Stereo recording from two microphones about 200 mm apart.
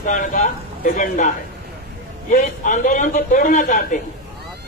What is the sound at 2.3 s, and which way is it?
A man's voice, 40° left (ahead or behind).